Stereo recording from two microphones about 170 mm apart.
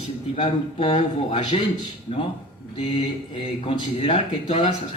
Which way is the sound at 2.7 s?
35° left (ahead or behind).